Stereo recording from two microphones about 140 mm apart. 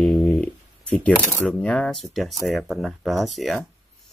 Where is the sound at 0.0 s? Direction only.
5° left (ahead or behind).